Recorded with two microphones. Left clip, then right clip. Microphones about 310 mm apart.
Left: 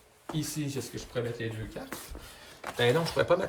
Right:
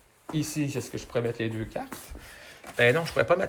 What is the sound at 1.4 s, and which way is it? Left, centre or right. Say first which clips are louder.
Speech: right 5 dB; centre.